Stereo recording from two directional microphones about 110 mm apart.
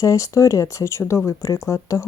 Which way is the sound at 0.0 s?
30° left (ahead or behind).